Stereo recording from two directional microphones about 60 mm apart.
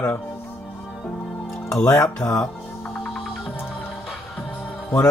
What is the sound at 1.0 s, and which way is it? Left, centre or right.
Music, left.